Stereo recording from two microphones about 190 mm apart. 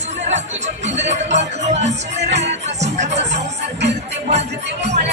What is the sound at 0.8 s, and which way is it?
Music, 35° right (ahead or behind).